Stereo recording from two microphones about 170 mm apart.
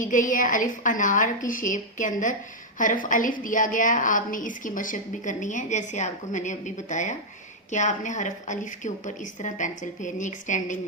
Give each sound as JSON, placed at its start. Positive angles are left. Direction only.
{"t": 0.0, "sound": "a woman's voice", "side_deg": 50}